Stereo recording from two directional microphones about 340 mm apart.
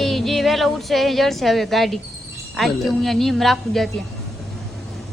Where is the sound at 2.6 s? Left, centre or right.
Centre.